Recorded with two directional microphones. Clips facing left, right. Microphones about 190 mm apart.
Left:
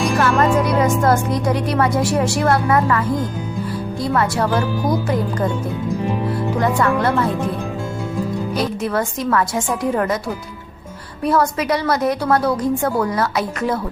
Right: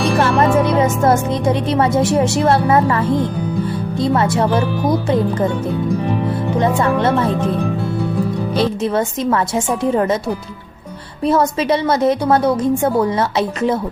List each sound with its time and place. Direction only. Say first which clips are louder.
0.2 s a woman's voice: right 2 dB; 25° right (ahead or behind)
6.6 s a woman's voice: right 2 dB; 25° right (ahead or behind)
8.5 s a woman's voice: right 4 dB; 25° right (ahead or behind)
11.3 s a woman's voice: right 3 dB; 25° right (ahead or behind)